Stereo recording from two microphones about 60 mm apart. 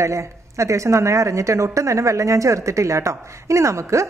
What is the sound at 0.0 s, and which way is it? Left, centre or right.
A woman's voice, right.